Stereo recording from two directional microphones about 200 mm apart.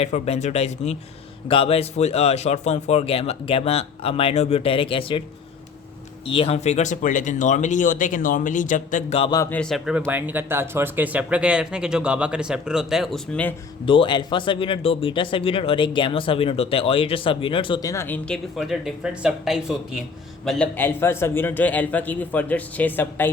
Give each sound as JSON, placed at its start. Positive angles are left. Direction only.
{"t": 0.0, "sound": "speech", "side_deg": 35}
{"t": 6.2, "sound": "speech", "side_deg": 30}
{"t": 9.4, "sound": "speech", "side_deg": 5}
{"t": 13.8, "sound": "speech", "side_deg": 25}